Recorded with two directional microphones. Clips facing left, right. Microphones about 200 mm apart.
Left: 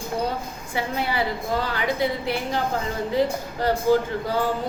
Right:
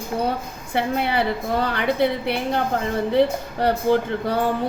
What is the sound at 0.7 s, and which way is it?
A woman's voice, 60° right (ahead or behind).